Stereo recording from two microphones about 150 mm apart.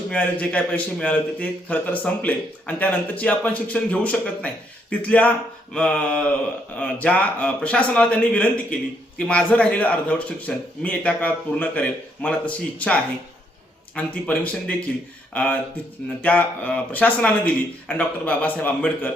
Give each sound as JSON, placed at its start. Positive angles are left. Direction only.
{"t": 0.1, "sound": "a man's voice", "side_deg": 10}